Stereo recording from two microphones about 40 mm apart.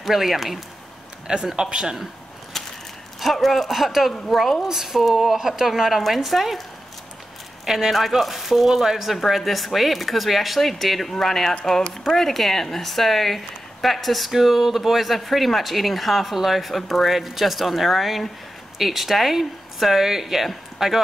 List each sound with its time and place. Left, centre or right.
0.0 s a woman's voice: centre
1.2 s speech: centre
2.5 s a sound: centre
3.2 s a woman's voice: centre
4.6 s a woman's voice: centre
7.6 s a woman's voice: centre